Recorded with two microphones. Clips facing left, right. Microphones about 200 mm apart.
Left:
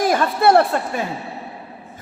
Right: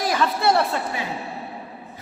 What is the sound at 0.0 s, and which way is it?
Speech, 50° left (ahead or behind).